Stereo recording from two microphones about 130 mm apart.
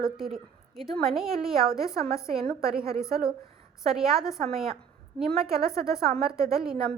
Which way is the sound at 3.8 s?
5° right (ahead or behind).